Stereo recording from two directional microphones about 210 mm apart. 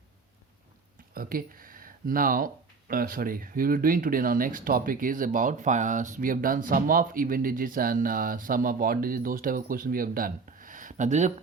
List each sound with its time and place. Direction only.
1.1 s speech: 45° right (ahead or behind)